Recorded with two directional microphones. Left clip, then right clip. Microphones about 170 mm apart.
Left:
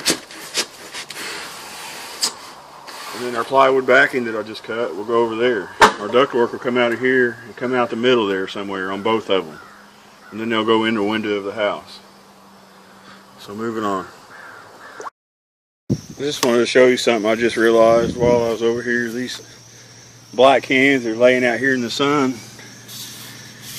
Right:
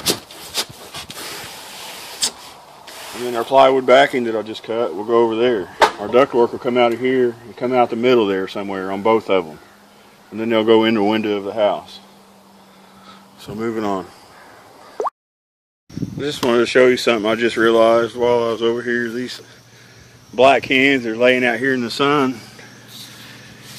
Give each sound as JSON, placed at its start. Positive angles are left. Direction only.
{"t": 3.3, "sound": "speech", "side_deg": -50}
{"t": 6.0, "sound": "speech", "side_deg": -35}
{"t": 13.4, "sound": "speech", "side_deg": -40}
{"t": 15.0, "sound": "a sound", "side_deg": -30}
{"t": 16.3, "sound": "speech", "side_deg": -5}